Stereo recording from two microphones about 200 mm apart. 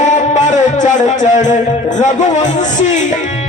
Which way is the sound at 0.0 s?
35° left (ahead or behind).